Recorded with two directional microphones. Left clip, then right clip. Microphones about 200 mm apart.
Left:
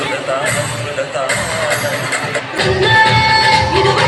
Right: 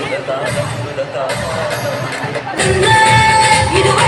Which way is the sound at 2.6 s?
40° left (ahead or behind).